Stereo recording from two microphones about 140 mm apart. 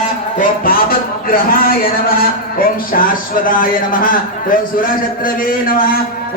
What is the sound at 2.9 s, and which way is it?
A man's voice, 90° left.